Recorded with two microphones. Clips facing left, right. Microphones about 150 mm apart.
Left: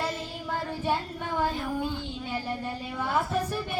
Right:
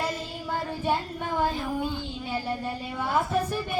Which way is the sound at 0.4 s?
10° right (ahead or behind).